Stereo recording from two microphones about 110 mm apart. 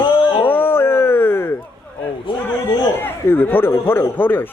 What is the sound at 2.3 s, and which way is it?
Speech, 50° left (ahead or behind).